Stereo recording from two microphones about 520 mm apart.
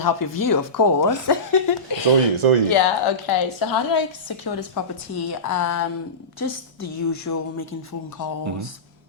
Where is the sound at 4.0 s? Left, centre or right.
Left.